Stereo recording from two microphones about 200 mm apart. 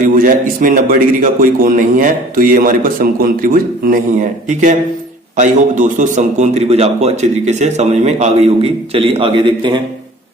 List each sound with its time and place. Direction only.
0.1 s a man's voice: 45° right (ahead or behind); by 9.8 s 25° right (ahead or behind)